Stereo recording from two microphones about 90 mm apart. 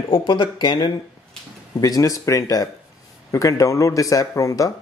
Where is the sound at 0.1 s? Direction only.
60° left (ahead or behind).